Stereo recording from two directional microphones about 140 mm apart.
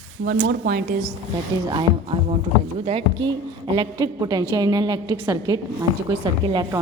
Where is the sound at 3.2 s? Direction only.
35° right (ahead or behind).